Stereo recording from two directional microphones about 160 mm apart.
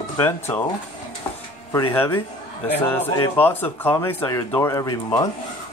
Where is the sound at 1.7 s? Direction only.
20° left (ahead or behind).